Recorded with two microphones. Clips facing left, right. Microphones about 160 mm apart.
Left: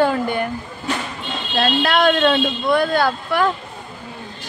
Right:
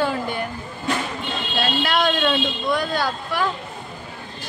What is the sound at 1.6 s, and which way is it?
Speech, 60° left (ahead or behind).